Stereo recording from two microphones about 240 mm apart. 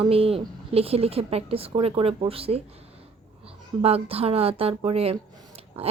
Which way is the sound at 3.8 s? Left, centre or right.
Right.